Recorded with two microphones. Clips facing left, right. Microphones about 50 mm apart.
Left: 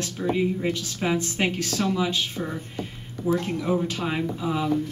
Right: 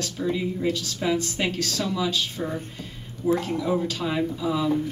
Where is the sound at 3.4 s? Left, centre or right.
Left.